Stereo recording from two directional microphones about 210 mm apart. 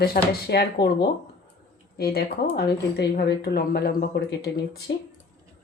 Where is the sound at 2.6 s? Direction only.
50° left (ahead or behind).